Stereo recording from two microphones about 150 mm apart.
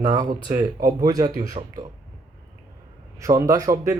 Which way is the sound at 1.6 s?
45° right (ahead or behind).